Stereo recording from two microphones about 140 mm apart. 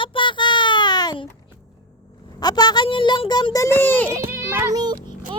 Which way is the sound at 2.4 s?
30° left (ahead or behind).